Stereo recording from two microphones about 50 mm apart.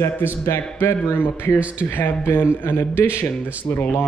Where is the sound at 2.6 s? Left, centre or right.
Left.